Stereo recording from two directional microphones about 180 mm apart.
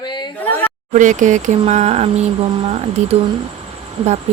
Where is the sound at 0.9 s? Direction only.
45° right (ahead or behind).